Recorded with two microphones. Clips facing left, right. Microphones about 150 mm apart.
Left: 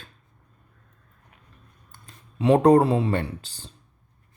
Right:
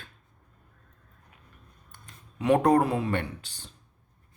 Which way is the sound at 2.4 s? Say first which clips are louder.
Left 5 dB; 30° left (ahead or behind).